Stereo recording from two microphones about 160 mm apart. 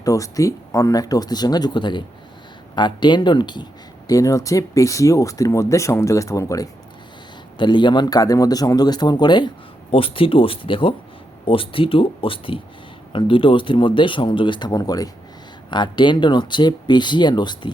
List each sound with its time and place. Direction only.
0.0 s speech: 20° left (ahead or behind)